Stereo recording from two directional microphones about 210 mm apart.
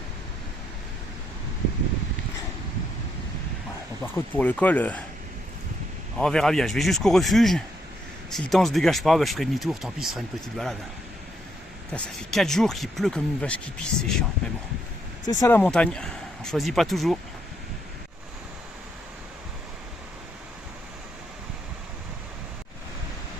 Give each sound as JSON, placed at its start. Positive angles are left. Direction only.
{"t": 4.0, "sound": "speech", "side_deg": 10}
{"t": 6.1, "sound": "speech", "side_deg": 5}
{"t": 11.9, "sound": "speech", "side_deg": 0}
{"t": 15.2, "sound": "speech", "side_deg": 20}